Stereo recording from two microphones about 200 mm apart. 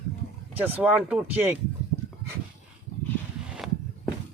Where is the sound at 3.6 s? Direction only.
Centre (ahead or behind).